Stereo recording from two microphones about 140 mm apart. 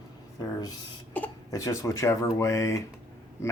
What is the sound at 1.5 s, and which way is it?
Speech, 25° left (ahead or behind).